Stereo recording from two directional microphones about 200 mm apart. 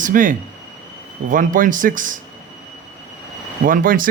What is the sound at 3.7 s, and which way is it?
Speech, 45° right (ahead or behind).